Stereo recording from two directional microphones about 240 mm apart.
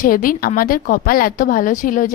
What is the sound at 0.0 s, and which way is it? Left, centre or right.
A woman's voice, left.